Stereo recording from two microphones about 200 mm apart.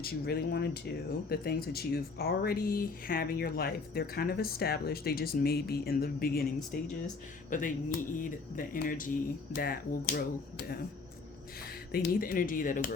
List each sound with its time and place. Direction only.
0.0 s speech: 50° left (ahead or behind)